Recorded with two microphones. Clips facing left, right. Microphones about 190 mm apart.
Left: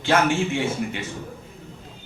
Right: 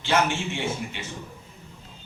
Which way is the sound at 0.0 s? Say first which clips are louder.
Left 4 dB; 50° left (ahead or behind).